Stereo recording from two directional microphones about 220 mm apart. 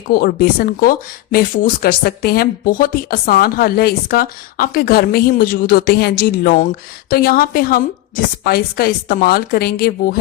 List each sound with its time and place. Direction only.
0.1 s speech: 45° left (ahead or behind)